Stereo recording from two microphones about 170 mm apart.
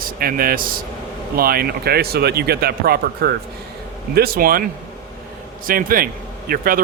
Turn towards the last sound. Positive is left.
turn(degrees=-55)  # may be behind; listen again after turning